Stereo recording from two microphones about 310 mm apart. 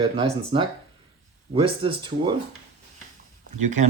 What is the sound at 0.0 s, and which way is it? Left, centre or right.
Speech, centre.